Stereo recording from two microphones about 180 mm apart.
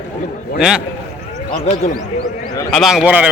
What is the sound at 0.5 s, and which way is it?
Speech, 5° right (ahead or behind).